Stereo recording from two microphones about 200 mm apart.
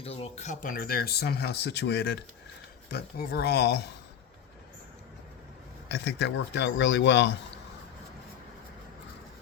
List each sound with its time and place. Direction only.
0.0 s speech: 30° left (ahead or behind); by 3.8 s 55° left (ahead or behind)
5.9 s a man's voice: 55° left (ahead or behind)